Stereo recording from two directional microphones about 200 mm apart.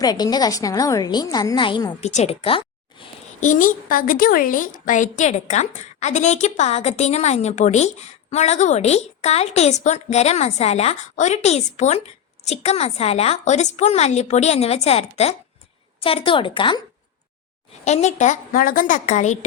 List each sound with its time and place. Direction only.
0.0 s a woman's voice: 20° left (ahead or behind)
3.4 s a woman's voice: 40° left (ahead or behind)
17.8 s a woman's voice: 35° left (ahead or behind)